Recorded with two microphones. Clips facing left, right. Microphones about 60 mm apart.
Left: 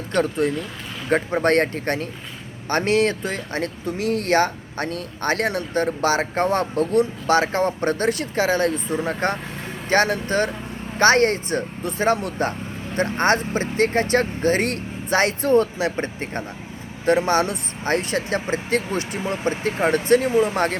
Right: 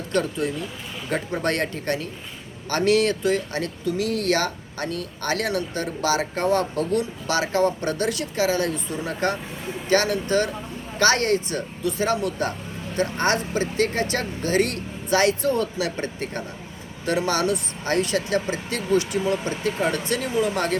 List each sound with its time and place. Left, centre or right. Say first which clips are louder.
0.1 s speech: left 4 dB; left